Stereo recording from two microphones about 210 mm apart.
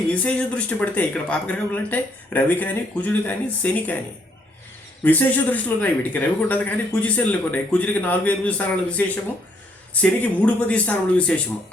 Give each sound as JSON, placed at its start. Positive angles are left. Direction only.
{"t": 0.1, "sound": "speech", "side_deg": 5}
{"t": 5.0, "sound": "speech", "side_deg": 5}